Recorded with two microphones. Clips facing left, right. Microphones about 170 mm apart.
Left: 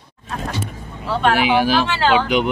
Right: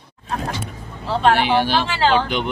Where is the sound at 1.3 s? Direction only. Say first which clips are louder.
Left 2 dB; 5° left (ahead or behind).